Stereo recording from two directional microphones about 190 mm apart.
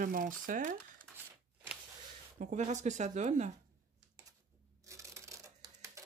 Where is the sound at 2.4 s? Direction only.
40° right (ahead or behind).